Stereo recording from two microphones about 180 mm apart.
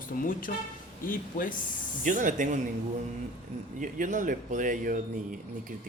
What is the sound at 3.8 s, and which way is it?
Speech, 45° right (ahead or behind).